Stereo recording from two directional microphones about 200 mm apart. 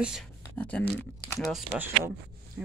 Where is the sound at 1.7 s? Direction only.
10° right (ahead or behind).